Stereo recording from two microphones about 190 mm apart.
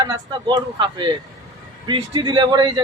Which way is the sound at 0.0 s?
25° right (ahead or behind).